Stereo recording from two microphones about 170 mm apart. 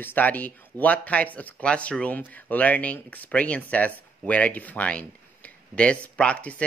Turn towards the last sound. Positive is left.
turn(degrees=5)  # may be behind; listen again after turning